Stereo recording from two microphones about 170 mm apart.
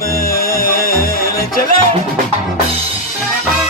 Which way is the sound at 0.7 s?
55° left (ahead or behind).